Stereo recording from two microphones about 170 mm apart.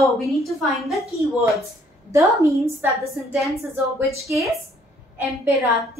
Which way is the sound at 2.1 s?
15° right (ahead or behind).